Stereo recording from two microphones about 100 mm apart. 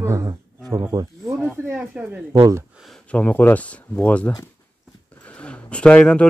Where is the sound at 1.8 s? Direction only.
10° right (ahead or behind).